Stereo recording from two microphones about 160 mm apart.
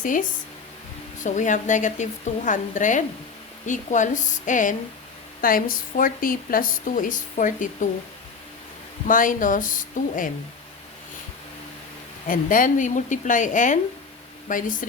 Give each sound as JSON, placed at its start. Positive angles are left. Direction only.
{"t": 0.0, "sound": "a woman's voice", "side_deg": 55}
{"t": 9.0, "sound": "speech", "side_deg": 55}
{"t": 12.3, "sound": "a woman's voice", "side_deg": 60}